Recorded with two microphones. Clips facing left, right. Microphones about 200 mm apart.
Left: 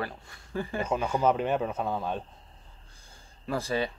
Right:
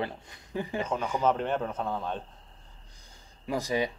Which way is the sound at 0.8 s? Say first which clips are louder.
Left 2 dB; 10° left (ahead or behind).